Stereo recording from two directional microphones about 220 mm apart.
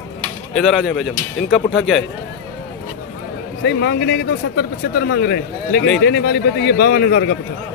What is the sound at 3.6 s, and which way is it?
Speech, 50° left (ahead or behind).